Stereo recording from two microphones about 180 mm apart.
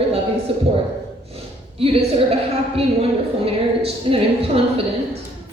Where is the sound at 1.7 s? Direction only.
30° right (ahead or behind).